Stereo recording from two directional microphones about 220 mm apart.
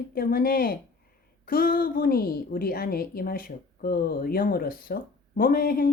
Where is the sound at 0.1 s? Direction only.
45° left (ahead or behind).